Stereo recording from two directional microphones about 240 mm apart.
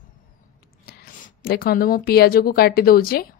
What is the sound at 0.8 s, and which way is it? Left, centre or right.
Speech, left.